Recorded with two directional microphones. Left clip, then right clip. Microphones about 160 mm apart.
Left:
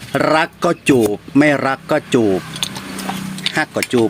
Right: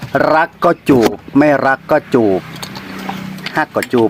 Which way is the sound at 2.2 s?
15° left (ahead or behind).